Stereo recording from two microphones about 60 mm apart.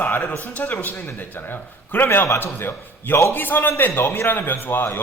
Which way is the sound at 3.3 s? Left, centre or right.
Left.